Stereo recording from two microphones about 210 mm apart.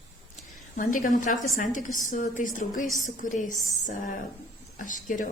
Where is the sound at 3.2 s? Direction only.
40° left (ahead or behind).